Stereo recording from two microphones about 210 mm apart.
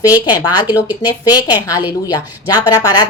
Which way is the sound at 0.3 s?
20° left (ahead or behind).